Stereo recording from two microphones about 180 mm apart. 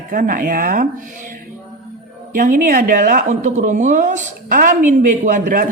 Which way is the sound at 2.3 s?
50° right (ahead or behind).